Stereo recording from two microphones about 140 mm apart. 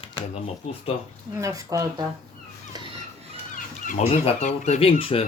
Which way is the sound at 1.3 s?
20° right (ahead or behind).